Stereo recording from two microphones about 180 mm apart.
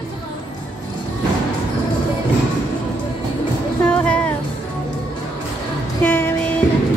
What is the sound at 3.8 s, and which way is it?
Music, 5° left (ahead or behind).